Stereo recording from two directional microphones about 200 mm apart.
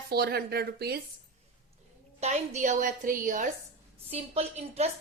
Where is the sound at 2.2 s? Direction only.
35° right (ahead or behind).